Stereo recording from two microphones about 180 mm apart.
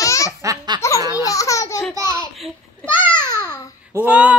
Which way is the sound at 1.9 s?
15° right (ahead or behind).